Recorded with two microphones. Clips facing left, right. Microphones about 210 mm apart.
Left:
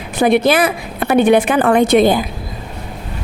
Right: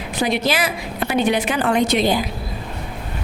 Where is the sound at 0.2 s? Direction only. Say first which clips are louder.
Left 8 dB; 55° left (ahead or behind).